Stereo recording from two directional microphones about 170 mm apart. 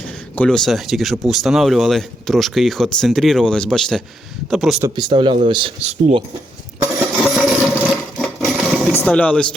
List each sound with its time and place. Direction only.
0.3 s speech: 5° left (ahead or behind)
4.8 s speech: 25° right (ahead or behind); by 6.2 s 40° right (ahead or behind)
7.2 s sewing machine: centre (ahead or behind)
9.0 s speech: 5° left (ahead or behind)